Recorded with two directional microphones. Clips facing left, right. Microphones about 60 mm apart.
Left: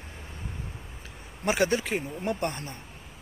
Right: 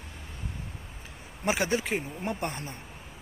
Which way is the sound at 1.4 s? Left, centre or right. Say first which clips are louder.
Left 2 dB; centre.